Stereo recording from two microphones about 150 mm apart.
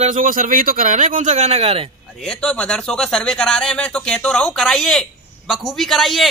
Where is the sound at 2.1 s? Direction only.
5° left (ahead or behind).